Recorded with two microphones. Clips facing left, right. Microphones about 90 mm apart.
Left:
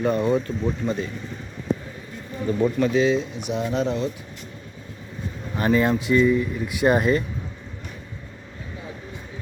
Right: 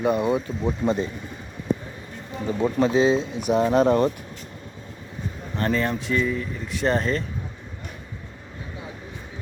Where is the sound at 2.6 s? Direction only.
30° right (ahead or behind); by 4.1 s 55° right (ahead or behind).